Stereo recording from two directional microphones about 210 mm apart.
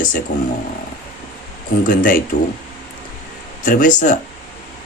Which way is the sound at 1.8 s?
40° left (ahead or behind).